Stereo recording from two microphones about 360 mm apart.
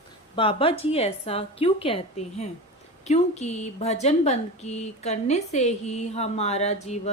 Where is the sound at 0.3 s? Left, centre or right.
Centre.